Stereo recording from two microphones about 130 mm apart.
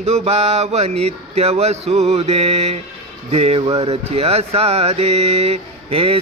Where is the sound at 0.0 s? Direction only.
55° right (ahead or behind).